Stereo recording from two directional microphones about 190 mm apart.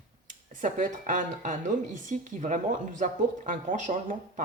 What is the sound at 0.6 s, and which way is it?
Speech, 40° right (ahead or behind).